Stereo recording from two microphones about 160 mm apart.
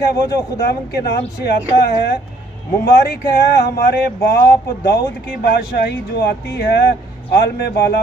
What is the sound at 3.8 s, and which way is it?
Speech, 80° left.